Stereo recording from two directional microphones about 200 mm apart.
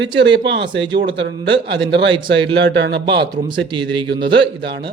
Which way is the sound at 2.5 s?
60° right (ahead or behind).